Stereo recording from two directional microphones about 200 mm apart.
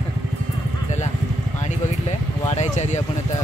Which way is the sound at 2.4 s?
35° left (ahead or behind).